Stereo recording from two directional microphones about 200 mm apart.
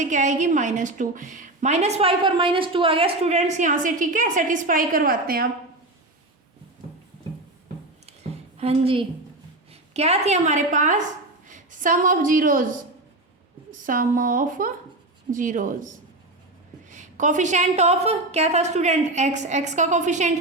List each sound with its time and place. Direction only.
0.0 s a woman's voice: 35° right (ahead or behind)
8.0 s a sound: 30° right (ahead or behind)
9.9 s a woman's voice: 30° right (ahead or behind)
13.7 s a woman's voice: 40° right (ahead or behind)
16.9 s a woman's voice: 40° right (ahead or behind)